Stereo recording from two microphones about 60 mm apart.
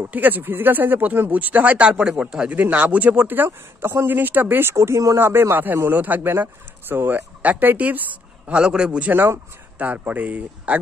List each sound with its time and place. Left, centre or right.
0.1 s speech: right; by 2.5 s centre
2.5 s speech: right
4.1 s speech: right
4.7 s speech: right
5.2 s speech: right
8.5 s speech: centre
9.8 s speech: right